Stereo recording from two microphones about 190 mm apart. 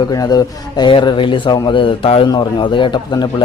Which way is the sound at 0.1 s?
20° left (ahead or behind).